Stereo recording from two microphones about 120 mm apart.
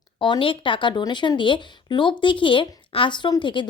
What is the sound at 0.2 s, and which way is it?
Speech, 45° left (ahead or behind).